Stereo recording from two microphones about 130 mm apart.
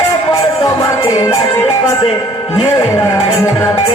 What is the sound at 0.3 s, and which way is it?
Music, 25° left (ahead or behind).